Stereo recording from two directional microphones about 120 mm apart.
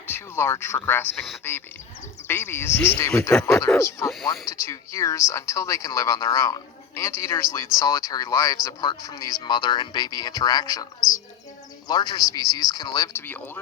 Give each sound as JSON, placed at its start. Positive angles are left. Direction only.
{"t": 0.1, "sound": "a man's voice", "side_deg": 20}
{"t": 13.2, "sound": "a man's voice", "side_deg": 15}